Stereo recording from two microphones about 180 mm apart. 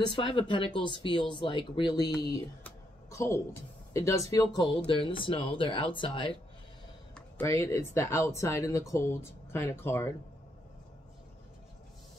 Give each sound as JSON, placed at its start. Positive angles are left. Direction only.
{"t": 0.0, "sound": "speech", "side_deg": 30}
{"t": 2.6, "sound": "a sound", "side_deg": 15}
{"t": 3.9, "sound": "speech", "side_deg": 15}
{"t": 7.2, "sound": "speech", "side_deg": 15}